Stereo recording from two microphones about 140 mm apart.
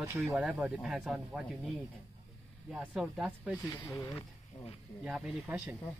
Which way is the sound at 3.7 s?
15° left (ahead or behind).